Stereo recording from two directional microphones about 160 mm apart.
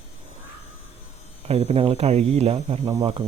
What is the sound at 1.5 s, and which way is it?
Speech, 40° right (ahead or behind).